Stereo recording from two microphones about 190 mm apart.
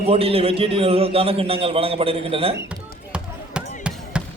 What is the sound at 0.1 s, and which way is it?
A man's voice, 30° right (ahead or behind).